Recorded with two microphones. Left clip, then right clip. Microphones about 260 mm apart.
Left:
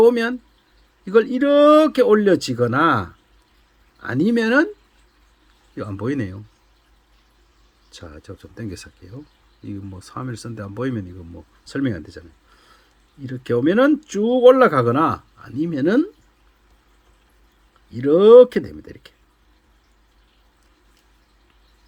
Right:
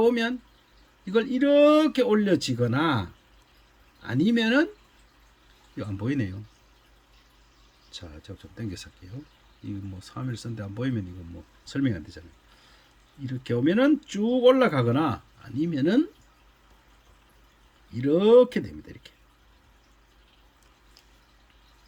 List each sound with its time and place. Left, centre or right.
0.0 s speech: centre
5.7 s speech: centre
7.9 s speech: centre
13.2 s speech: centre
17.9 s speech: centre